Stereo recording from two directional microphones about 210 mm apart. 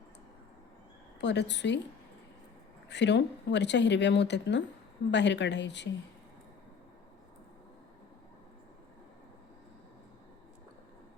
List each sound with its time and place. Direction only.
1.2 s speech: 55° left (ahead or behind)
2.9 s speech: 55° left (ahead or behind)